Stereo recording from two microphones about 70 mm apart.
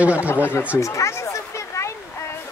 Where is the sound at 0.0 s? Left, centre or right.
Right.